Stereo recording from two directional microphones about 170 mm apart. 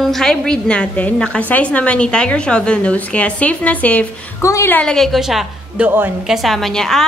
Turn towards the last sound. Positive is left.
turn(degrees=0)  # may be behind; listen again after turning